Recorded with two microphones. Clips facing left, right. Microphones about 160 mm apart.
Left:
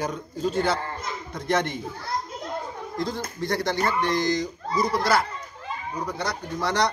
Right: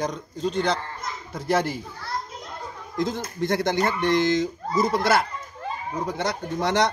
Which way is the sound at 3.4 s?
20° right (ahead or behind).